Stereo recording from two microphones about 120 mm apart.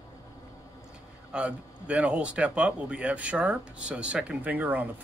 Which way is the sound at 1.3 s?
10° right (ahead or behind).